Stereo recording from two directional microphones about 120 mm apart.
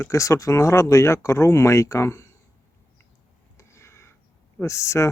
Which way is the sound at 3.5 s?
25° left (ahead or behind).